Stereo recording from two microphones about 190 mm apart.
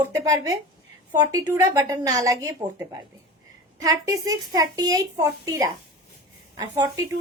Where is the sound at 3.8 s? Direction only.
15° right (ahead or behind).